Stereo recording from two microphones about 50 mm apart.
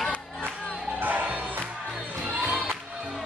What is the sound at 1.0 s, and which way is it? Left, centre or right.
Music, right.